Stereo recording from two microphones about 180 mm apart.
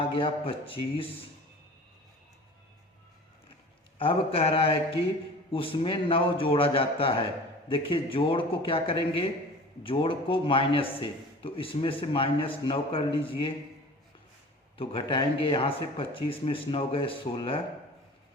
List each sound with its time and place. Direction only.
0.0 s a man's voice: 30° left (ahead or behind)
3.9 s a man's voice: 30° left (ahead or behind)
14.8 s a man's voice: 30° left (ahead or behind)